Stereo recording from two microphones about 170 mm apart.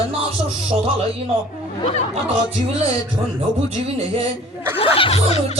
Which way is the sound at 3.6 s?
35° right (ahead or behind).